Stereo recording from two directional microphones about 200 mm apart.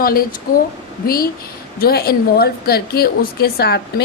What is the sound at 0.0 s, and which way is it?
A woman's voice, 45° left (ahead or behind).